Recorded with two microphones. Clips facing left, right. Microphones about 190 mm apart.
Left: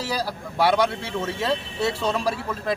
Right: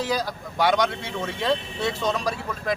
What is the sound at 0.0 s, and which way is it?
Speech, 10° left (ahead or behind).